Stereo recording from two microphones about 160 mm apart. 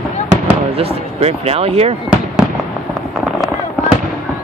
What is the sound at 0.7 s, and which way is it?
Speech, 40° right (ahead or behind).